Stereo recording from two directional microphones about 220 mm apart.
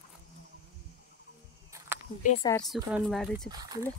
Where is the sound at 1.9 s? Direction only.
10° right (ahead or behind).